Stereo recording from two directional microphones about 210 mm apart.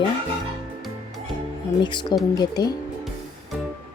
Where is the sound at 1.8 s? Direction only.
20° left (ahead or behind).